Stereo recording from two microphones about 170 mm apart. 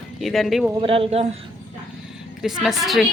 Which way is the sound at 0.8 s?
30° right (ahead or behind).